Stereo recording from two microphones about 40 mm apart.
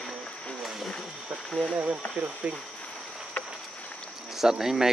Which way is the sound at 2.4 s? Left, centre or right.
Right.